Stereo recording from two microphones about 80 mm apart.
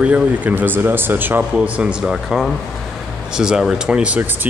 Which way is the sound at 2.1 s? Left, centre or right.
Centre.